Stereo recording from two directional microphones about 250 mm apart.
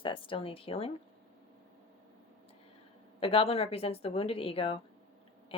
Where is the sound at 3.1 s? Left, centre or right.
Left.